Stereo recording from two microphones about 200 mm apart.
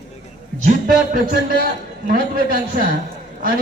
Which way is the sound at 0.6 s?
45° right (ahead or behind).